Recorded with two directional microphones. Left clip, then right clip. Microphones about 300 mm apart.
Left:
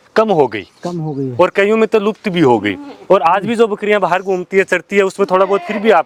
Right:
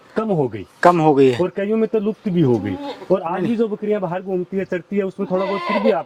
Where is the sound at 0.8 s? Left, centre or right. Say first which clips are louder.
Right 15 dB; centre.